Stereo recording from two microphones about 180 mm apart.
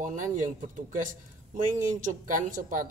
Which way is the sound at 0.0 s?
45° right (ahead or behind).